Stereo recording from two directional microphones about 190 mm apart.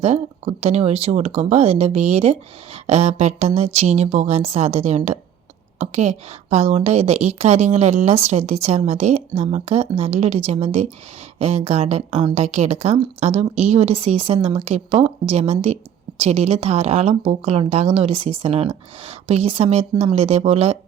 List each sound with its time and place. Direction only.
0.0 s speech: 35° right (ahead or behind)